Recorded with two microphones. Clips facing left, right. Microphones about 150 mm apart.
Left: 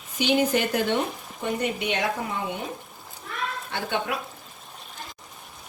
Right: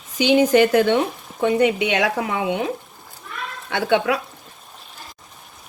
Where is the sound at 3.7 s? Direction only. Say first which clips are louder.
Right 11 dB; 85° right.